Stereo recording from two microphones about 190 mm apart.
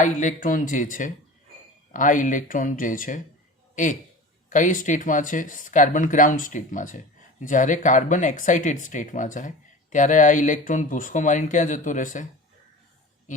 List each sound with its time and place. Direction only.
0.0 s speech: 40° left (ahead or behind)